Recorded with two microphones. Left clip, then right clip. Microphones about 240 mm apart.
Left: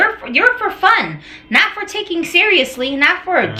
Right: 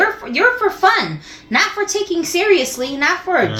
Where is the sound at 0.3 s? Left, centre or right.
Left.